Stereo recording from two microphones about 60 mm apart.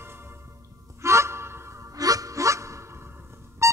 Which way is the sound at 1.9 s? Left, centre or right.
Right.